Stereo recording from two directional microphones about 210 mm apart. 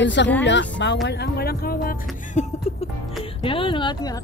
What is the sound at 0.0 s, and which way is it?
Speech, 60° left (ahead or behind).